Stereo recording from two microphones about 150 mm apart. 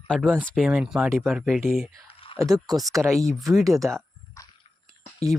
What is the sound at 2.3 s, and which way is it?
Speech, 25° right (ahead or behind).